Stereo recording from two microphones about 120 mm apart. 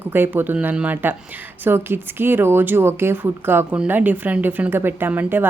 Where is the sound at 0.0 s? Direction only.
15° right (ahead or behind).